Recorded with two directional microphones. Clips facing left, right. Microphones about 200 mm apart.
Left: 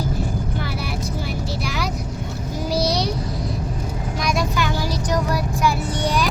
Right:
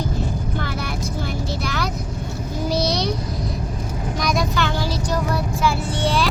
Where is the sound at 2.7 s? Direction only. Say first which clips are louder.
Left 1 dB; 30° left (ahead or behind).